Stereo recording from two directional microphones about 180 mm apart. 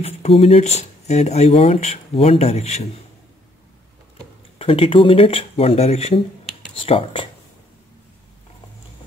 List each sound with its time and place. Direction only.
0.4 s speech: 35° left (ahead or behind)
4.6 s speech: 30° left (ahead or behind)